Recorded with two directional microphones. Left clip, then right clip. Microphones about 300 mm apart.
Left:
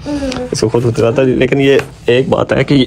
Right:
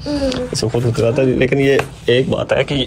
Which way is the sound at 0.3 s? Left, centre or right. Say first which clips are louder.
Left 2 dB; centre.